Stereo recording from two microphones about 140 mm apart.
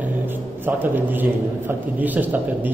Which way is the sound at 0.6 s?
15° right (ahead or behind).